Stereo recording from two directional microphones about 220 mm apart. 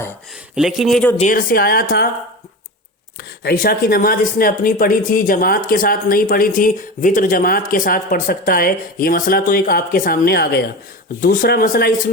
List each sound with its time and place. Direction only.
0.5 s speech: centre (ahead or behind)
1.2 s speech: 40° left (ahead or behind)
3.2 s speech: 45° left (ahead or behind)